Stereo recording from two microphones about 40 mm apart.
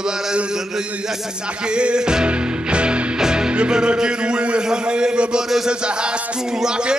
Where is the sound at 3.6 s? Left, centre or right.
Right.